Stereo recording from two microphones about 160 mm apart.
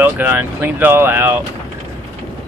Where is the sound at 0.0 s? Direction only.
10° right (ahead or behind).